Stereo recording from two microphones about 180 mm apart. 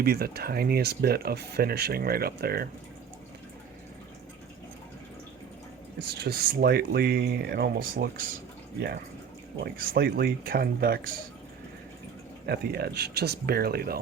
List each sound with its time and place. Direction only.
0.0 s speech: 60° right (ahead or behind)
6.1 s speech: 60° right (ahead or behind)
8.8 s speech: 60° right (ahead or behind)
12.5 s speech: 60° right (ahead or behind)